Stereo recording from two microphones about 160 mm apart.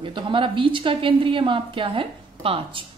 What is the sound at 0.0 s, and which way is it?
A woman's voice, 30° right (ahead or behind).